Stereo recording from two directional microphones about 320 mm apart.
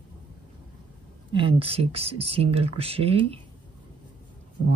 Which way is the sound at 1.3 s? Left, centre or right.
Centre.